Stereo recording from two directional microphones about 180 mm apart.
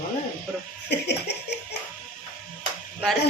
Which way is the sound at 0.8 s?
70° left (ahead or behind).